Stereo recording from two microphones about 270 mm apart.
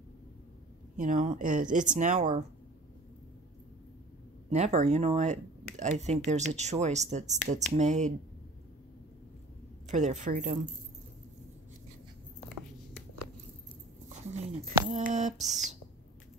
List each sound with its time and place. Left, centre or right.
0.9 s speech: right
4.5 s speech: right
9.8 s speech: right
14.0 s a sound: right
14.9 s speech: right